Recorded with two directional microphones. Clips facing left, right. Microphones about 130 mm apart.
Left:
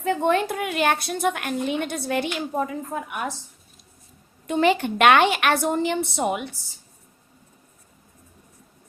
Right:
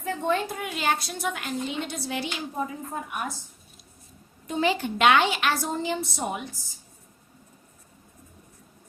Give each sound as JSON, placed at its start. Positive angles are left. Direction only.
{"t": 0.0, "sound": "a woman's voice", "side_deg": 75}
{"t": 4.4, "sound": "a woman's voice", "side_deg": 65}